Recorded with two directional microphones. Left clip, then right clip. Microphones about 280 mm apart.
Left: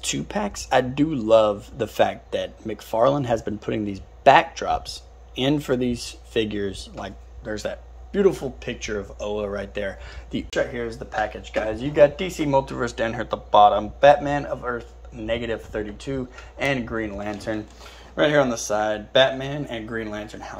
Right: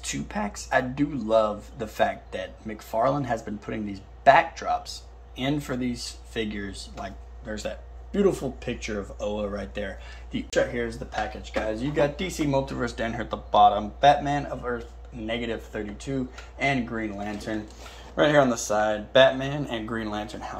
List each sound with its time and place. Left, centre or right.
0.0 s speech: left; by 11.0 s centre
11.1 s speech: centre